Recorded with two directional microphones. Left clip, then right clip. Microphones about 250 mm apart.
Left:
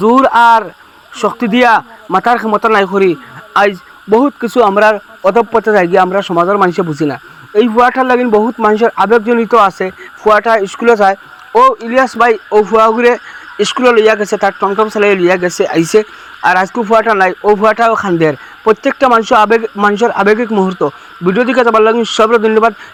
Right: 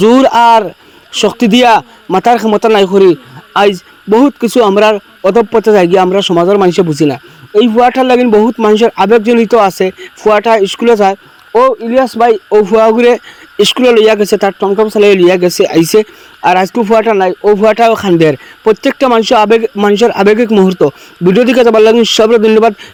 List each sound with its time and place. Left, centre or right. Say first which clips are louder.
0.0 s speech: right 1 dB; right
11.5 s speech: even; centre
11.9 s speech: right 1 dB; right
14.6 s speech: right 2 dB; right
15.0 s speech: right 4 dB; right